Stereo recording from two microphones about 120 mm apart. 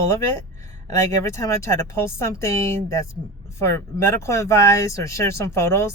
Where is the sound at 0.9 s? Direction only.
25° left (ahead or behind).